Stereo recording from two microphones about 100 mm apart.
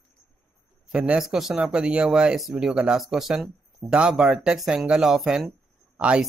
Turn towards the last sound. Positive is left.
turn(degrees=-10)  # may be behind; listen again after turning